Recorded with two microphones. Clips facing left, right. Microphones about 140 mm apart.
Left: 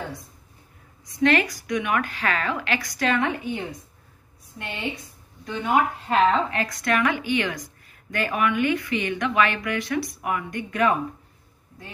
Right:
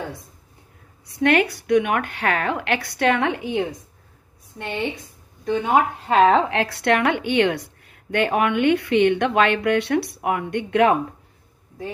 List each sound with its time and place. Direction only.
1.1 s speech: 65° right (ahead or behind)
5.4 s speech: 50° right (ahead or behind); by 11.0 s 70° right (ahead or behind)